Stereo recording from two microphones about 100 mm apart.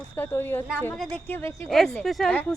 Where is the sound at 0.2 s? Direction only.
20° left (ahead or behind).